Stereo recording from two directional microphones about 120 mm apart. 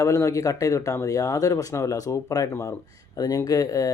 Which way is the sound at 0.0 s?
25° left (ahead or behind).